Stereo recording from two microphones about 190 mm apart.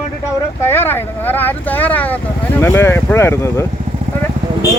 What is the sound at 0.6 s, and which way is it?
Speech, 10° left (ahead or behind).